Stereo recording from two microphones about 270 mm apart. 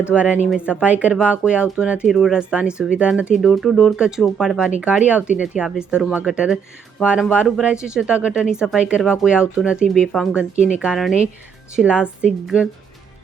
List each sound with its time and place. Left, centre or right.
0.1 s speech: centre